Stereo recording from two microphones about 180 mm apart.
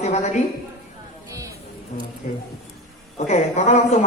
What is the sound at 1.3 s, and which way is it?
Music, 20° right (ahead or behind).